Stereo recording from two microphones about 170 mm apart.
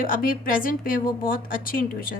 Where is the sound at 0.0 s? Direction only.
55° left (ahead or behind).